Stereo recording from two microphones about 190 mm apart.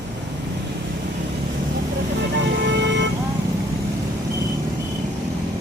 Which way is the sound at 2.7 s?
70° right (ahead or behind).